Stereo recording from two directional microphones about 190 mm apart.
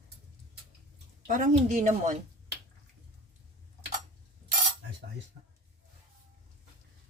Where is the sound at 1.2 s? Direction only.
40° right (ahead or behind).